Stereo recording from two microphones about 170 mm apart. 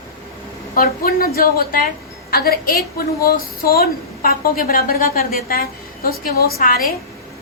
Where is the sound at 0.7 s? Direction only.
60° left (ahead or behind).